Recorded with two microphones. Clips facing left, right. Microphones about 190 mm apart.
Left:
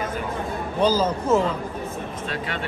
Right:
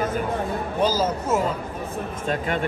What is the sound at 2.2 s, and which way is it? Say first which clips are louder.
Speech: right 7 dB; 45° right (ahead or behind).